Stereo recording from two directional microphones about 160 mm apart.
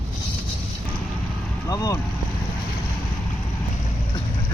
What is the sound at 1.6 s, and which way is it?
Speech, 20° left (ahead or behind).